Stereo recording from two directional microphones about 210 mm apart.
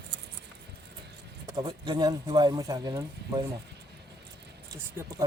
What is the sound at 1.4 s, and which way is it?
Speech, 20° right (ahead or behind).